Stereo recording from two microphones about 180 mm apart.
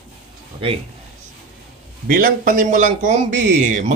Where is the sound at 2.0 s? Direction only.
50° right (ahead or behind).